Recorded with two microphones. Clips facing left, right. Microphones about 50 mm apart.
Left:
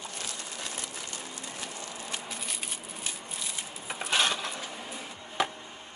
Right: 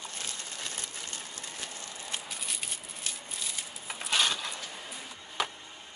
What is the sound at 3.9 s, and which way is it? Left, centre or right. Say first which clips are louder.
Coin: left 2 dB; left.